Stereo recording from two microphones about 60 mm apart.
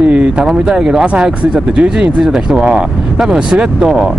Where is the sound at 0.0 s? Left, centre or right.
Right.